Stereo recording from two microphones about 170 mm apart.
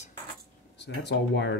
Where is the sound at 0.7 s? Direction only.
80° left.